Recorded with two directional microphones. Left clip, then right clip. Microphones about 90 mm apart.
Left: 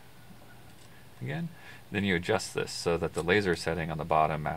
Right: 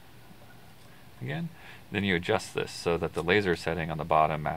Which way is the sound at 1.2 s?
15° right (ahead or behind).